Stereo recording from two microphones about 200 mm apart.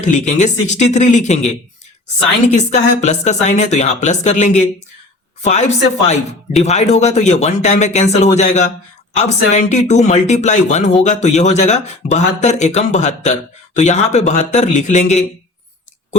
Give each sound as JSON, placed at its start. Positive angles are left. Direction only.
{"t": 0.0, "sound": "speech", "side_deg": 35}